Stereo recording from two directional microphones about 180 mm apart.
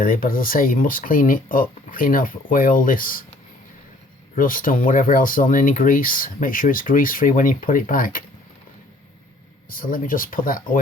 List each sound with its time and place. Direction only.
0.0 s speech: 50° left (ahead or behind)
4.4 s speech: 50° left (ahead or behind)
9.6 s speech: 50° left (ahead or behind)